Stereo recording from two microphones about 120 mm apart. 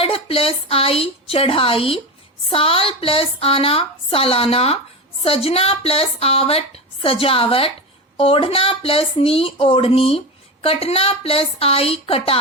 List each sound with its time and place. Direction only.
0.0 s a woman's voice: 50° left (ahead or behind)